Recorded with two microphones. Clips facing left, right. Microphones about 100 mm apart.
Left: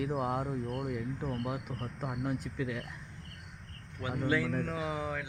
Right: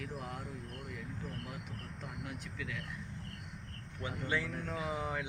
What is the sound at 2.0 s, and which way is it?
Speech, 50° left (ahead or behind).